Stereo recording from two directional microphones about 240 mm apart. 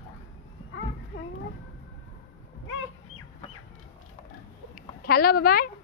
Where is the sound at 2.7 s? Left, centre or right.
Left.